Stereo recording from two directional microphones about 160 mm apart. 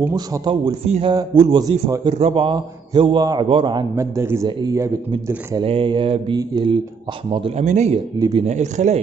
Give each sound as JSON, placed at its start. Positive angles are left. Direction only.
{"t": 0.1, "sound": "speech", "side_deg": -25}
{"t": 0.8, "sound": "a man's voice", "side_deg": -40}
{"t": 1.1, "sound": "a man's voice", "side_deg": -30}
{"t": 3.9, "sound": "a man's voice", "side_deg": -15}
{"t": 4.5, "sound": "a man's voice", "side_deg": -30}
{"t": 7.6, "sound": "speech", "side_deg": -45}
{"t": 8.2, "sound": "speech", "side_deg": -25}
{"t": 8.5, "sound": "speech", "side_deg": -45}